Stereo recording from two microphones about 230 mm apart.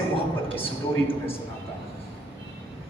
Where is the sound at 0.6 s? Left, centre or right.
Left.